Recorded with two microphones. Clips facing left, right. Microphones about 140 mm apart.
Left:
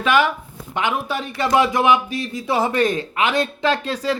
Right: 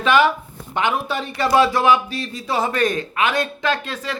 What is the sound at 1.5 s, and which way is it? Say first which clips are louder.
A man's voice: right 1 dB; 15° left (ahead or behind).